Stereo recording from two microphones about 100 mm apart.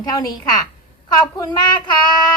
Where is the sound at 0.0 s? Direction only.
40° left (ahead or behind).